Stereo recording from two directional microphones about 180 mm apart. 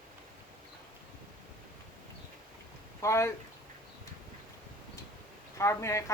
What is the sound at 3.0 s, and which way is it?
Speech, 15° left (ahead or behind).